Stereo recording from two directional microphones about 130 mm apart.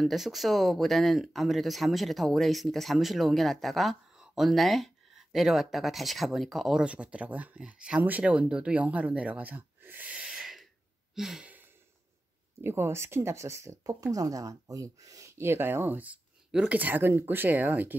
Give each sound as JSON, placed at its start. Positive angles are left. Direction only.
{"t": 0.0, "sound": "speech", "side_deg": 0}
{"t": 11.1, "sound": "a sound", "side_deg": -5}
{"t": 12.6, "sound": "speech", "side_deg": -20}